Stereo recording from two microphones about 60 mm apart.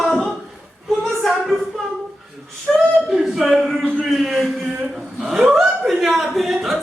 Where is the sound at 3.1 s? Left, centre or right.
Centre.